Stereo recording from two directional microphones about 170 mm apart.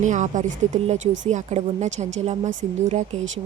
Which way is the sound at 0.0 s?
45° right (ahead or behind).